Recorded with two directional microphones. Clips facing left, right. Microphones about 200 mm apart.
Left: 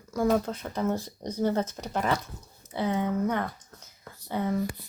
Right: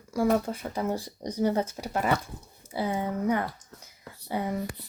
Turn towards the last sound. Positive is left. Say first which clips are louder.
# left 2 dB
turn(degrees=-15)  # may be behind; listen again after turning